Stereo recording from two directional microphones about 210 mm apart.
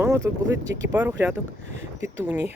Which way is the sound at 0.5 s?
55° right (ahead or behind).